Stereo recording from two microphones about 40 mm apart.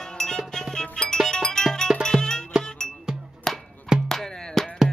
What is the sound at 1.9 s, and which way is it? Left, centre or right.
Music, right.